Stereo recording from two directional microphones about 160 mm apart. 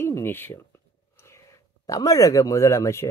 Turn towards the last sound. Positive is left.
turn(degrees=15)  # may be behind; listen again after turning